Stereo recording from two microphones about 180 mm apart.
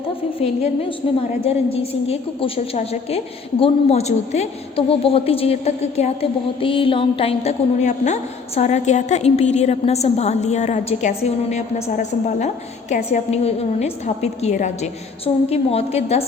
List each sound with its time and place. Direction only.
0.3 s a woman's voice: 35° left (ahead or behind)